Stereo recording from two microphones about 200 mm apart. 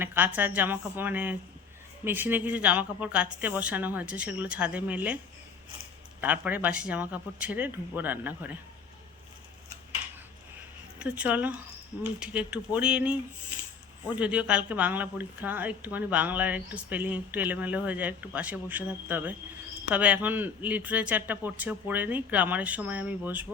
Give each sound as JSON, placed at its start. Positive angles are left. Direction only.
{"t": 0.0, "sound": "a woman's voice", "side_deg": -10}
{"t": 6.2, "sound": "a woman's voice", "side_deg": -10}
{"t": 11.0, "sound": "a woman's voice", "side_deg": -5}
{"t": 14.2, "sound": "a woman's voice", "side_deg": -5}